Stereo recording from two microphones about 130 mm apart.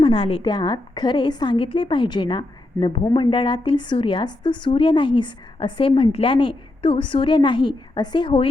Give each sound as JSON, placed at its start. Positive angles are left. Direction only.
{"t": 0.0, "sound": "a woman's voice", "side_deg": 45}